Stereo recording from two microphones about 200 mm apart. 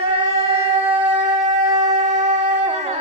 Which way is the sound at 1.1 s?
35° right (ahead or behind).